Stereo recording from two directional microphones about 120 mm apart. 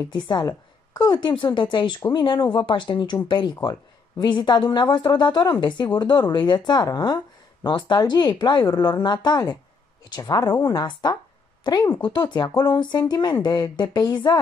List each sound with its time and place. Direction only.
0.1 s a woman's voice: 35° left (ahead or behind)